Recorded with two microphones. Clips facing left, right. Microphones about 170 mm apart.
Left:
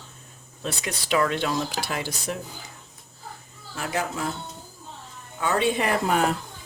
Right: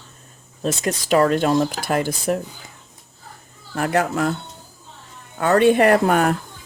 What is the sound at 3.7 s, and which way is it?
Speech, 60° right (ahead or behind).